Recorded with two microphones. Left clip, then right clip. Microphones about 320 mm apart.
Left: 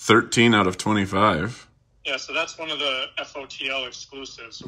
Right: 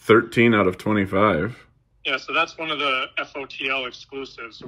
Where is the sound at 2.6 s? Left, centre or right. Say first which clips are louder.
Right 3 dB; centre.